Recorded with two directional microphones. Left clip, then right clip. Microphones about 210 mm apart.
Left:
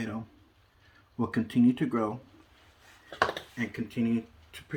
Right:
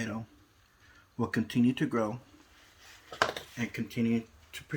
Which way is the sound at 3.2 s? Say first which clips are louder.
Left 2 dB; 35° right (ahead or behind).